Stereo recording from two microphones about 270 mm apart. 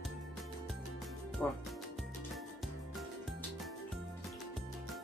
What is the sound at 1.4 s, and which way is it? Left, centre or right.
Speech, centre.